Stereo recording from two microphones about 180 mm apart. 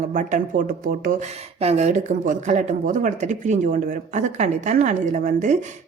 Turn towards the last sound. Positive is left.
turn(degrees=-45)  # may be behind; listen again after turning